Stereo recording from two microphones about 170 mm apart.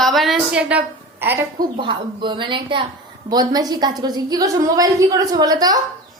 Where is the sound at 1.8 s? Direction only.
30° right (ahead or behind).